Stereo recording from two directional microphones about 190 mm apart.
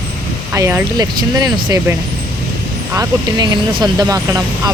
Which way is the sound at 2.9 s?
20° right (ahead or behind).